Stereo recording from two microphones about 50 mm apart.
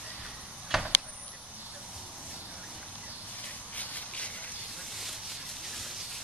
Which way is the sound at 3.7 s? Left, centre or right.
Left.